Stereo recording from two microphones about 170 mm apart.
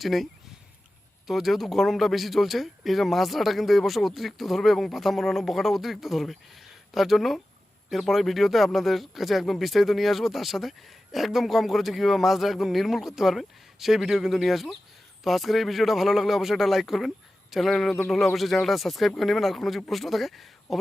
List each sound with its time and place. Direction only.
0.0 s speech: centre (ahead or behind)
1.3 s speech: centre (ahead or behind)